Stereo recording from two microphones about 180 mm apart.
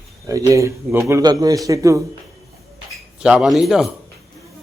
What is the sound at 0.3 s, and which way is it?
Speech, 20° right (ahead or behind).